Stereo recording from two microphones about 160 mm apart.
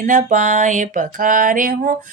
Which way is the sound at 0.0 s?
55° right (ahead or behind).